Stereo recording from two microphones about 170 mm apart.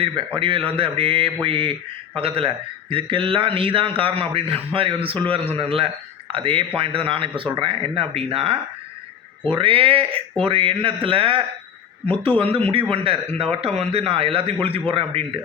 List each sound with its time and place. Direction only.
0.3 s a man's voice: 30° right (ahead or behind)
9.6 s a man's voice: 30° right (ahead or behind)